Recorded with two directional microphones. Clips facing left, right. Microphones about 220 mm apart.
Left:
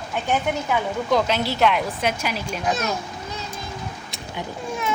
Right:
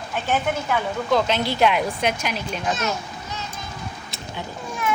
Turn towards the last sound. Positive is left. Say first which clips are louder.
# even
turn(degrees=20)  # may be behind; listen again after turning